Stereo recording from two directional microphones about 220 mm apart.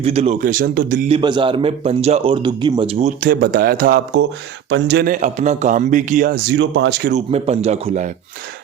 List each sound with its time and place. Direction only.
0.0 s a man's voice: 30° right (ahead or behind)
1.1 s a man's voice: 20° right (ahead or behind)
3.2 s a man's voice: 45° right (ahead or behind)
5.2 s a man's voice: 30° right (ahead or behind)
6.5 s speech: 55° right (ahead or behind)
7.1 s a man's voice: 30° right (ahead or behind)